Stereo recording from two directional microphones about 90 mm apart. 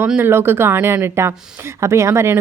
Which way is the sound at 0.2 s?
25° right (ahead or behind).